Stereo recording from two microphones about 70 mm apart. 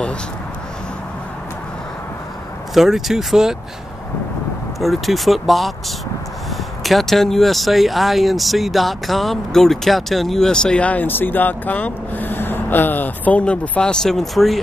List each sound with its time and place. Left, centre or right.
2.7 s speech: centre
4.7 s speech: centre